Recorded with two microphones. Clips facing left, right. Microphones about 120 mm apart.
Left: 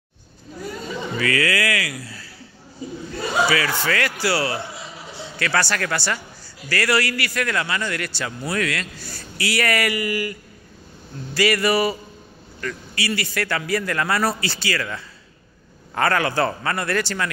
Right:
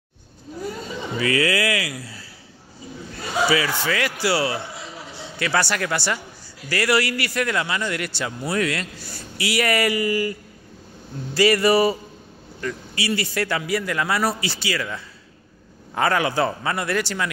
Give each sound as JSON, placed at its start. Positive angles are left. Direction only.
{"t": 1.1, "sound": "a sound", "side_deg": -25}
{"t": 3.4, "sound": "a man's voice", "side_deg": -15}
{"t": 11.3, "sound": "a man's voice", "side_deg": -25}
{"t": 13.6, "sound": "a man's voice", "side_deg": -10}